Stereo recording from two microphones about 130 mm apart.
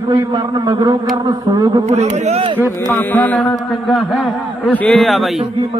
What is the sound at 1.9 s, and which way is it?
Speech, 60° right (ahead or behind).